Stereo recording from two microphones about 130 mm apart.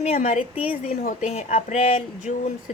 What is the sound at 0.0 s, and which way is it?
A woman's voice, 55° left (ahead or behind).